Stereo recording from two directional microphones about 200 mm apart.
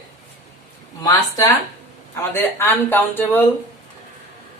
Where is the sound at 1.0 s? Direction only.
20° left (ahead or behind).